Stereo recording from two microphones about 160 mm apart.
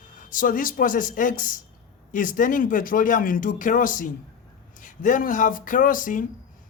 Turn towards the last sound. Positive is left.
turn(degrees=55)  # may be behind; listen again after turning